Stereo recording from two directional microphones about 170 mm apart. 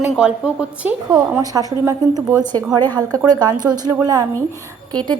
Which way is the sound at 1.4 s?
20° right (ahead or behind).